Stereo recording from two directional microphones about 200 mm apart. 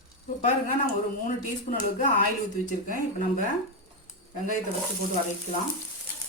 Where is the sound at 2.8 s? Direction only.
45° left (ahead or behind).